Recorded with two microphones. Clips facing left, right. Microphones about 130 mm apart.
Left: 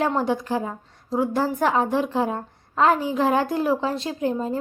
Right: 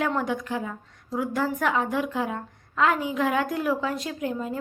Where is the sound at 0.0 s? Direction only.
30° left (ahead or behind).